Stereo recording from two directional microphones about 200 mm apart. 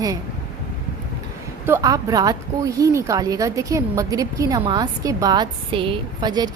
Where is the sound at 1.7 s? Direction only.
15° right (ahead or behind).